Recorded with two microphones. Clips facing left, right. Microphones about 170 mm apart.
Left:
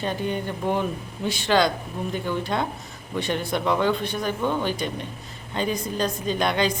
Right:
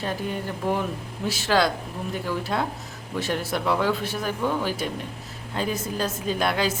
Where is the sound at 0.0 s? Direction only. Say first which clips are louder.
Left 2 dB; centre (ahead or behind).